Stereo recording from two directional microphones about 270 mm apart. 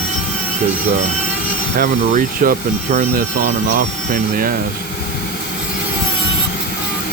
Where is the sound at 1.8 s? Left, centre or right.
Right.